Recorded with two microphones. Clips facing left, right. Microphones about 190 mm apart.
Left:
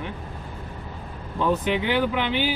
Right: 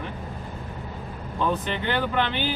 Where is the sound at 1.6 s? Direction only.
10° left (ahead or behind).